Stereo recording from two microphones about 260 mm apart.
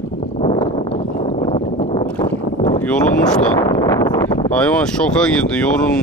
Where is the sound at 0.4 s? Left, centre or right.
Centre.